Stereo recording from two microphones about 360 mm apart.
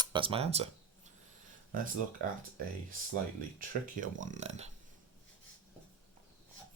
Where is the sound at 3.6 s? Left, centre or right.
Right.